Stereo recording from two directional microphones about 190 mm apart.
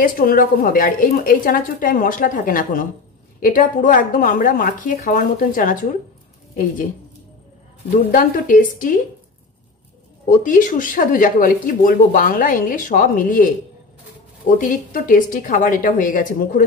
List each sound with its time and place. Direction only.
0.0 s speech: 50° left (ahead or behind)
7.9 s speech: 45° left (ahead or behind)
10.2 s speech: 45° left (ahead or behind)
14.6 s speech: 45° left (ahead or behind)